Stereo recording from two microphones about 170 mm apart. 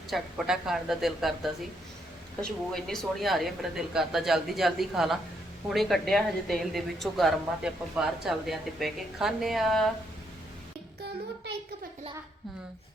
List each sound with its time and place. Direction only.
0.1 s a woman's voice: centre (ahead or behind)
2.4 s a woman's voice: centre (ahead or behind)